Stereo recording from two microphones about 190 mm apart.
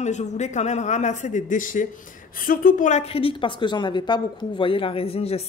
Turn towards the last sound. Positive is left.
turn(degrees=30)  # may be behind; listen again after turning